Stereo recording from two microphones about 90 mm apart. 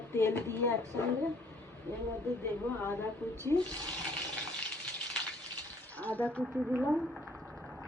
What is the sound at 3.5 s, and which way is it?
Speech, 15° left (ahead or behind).